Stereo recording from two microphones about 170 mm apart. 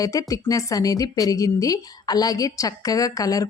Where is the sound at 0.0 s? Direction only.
20° left (ahead or behind).